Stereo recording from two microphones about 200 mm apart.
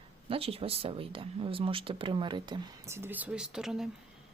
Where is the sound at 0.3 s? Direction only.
30° right (ahead or behind); by 3.8 s 5° right (ahead or behind).